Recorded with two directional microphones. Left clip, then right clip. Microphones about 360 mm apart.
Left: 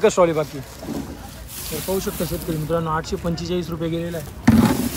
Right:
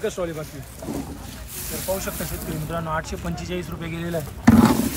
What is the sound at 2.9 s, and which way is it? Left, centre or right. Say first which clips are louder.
Speech: left 4 dB; centre.